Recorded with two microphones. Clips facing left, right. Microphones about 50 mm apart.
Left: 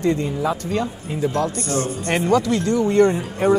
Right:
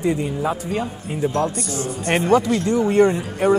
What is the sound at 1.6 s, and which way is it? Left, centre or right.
Speech, left.